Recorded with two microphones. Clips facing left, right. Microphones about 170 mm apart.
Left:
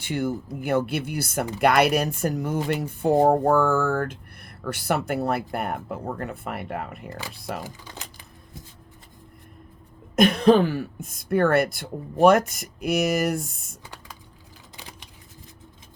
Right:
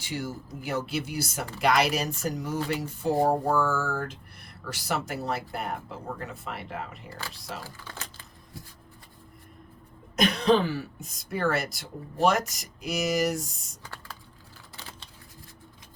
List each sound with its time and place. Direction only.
0.0 s speech: 55° left (ahead or behind)
7.1 s speech: 15° left (ahead or behind)
7.3 s speech: 55° left (ahead or behind)
7.6 s speech: 15° left (ahead or behind)
10.2 s speech: 55° left (ahead or behind)
14.8 s scissors: 15° left (ahead or behind)